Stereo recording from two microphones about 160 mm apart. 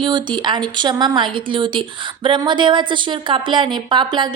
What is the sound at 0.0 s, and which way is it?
A woman's voice, 30° right (ahead or behind).